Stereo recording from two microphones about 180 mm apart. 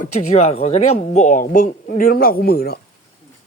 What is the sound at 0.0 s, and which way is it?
Speech, 35° left (ahead or behind).